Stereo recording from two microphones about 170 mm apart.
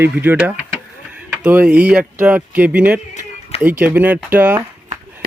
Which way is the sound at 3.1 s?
45° left (ahead or behind).